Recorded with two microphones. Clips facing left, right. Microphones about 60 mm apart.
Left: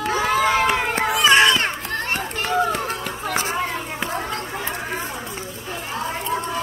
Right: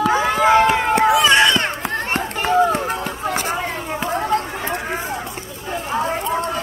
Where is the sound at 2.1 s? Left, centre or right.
Centre.